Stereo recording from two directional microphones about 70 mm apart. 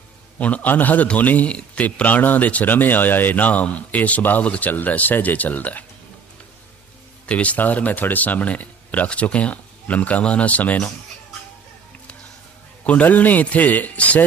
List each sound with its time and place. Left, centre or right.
0.3 s a man's voice: left
7.3 s a man's voice: centre
12.8 s a man's voice: left